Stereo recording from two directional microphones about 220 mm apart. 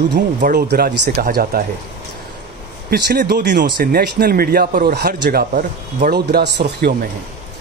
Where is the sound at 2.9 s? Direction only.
45° right (ahead or behind).